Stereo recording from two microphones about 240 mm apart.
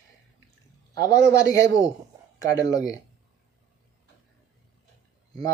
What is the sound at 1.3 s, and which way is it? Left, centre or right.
Speech, centre.